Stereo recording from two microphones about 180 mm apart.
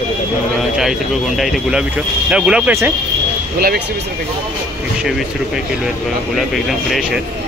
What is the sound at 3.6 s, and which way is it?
Speech, 60° right (ahead or behind).